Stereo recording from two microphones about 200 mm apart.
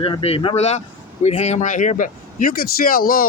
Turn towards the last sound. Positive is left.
turn(degrees=45)  # may be behind; listen again after turning